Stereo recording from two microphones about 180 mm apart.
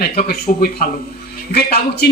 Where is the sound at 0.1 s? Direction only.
60° left (ahead or behind).